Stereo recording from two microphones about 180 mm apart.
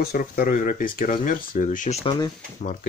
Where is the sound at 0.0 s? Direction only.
55° left (ahead or behind).